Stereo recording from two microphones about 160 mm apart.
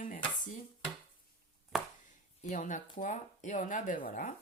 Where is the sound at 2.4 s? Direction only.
50° left (ahead or behind).